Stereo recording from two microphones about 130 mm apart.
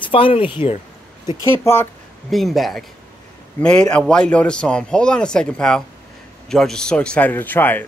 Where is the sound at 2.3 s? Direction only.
Centre (ahead or behind).